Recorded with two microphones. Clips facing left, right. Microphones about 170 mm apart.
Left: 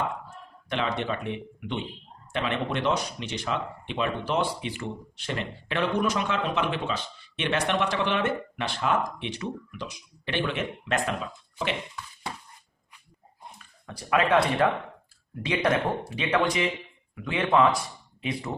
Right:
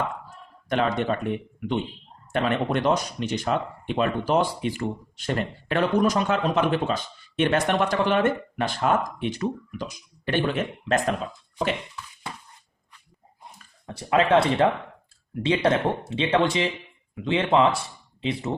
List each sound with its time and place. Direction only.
0.7 s speech: 45° right (ahead or behind)
13.6 s speech: 30° right (ahead or behind)